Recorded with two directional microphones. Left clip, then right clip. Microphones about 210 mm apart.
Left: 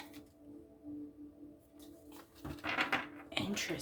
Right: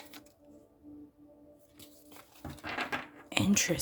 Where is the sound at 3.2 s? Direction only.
55° right (ahead or behind).